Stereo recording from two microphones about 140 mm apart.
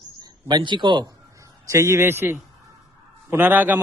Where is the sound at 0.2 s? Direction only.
30° right (ahead or behind).